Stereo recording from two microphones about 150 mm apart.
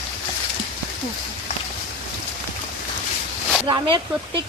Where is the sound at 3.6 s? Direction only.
30° right (ahead or behind).